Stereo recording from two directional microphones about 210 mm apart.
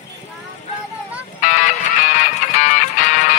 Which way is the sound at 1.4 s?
35° left (ahead or behind).